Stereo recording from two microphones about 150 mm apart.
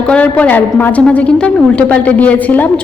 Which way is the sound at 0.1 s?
10° left (ahead or behind).